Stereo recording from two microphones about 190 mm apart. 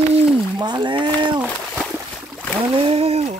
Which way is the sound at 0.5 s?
20° right (ahead or behind).